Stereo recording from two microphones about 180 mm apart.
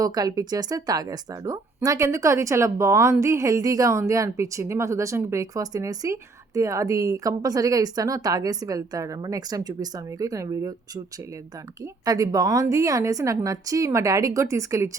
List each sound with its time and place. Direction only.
0.0 s a woman's voice: 20° right (ahead or behind)